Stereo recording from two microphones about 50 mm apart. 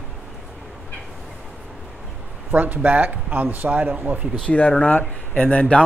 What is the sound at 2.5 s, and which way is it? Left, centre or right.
Speech, right.